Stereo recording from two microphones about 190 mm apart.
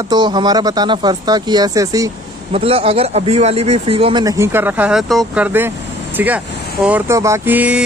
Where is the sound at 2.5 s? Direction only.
30° right (ahead or behind); by 7.8 s 10° right (ahead or behind).